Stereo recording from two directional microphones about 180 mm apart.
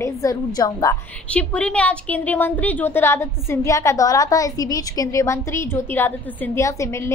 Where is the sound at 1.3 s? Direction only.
5° left (ahead or behind).